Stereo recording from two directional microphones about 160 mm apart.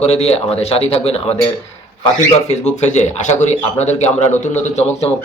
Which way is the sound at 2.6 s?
45° left (ahead or behind).